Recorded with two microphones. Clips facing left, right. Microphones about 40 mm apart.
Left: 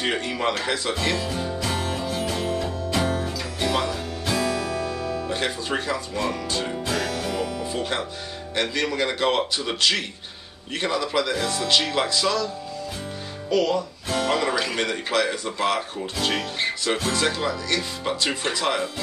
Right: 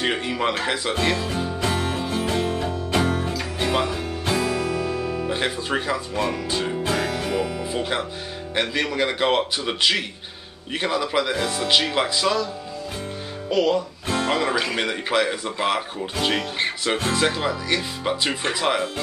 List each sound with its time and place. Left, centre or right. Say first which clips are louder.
0.0 s speech: right 1 dB; centre
1.6 s music: right 2 dB; right
8.5 s speech: right 1 dB; centre
13.5 s guitar: right 1 dB; right
14.3 s speech: right 1 dB; centre